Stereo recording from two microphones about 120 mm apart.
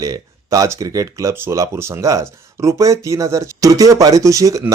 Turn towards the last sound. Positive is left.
turn(degrees=-25)  # may be behind; listen again after turning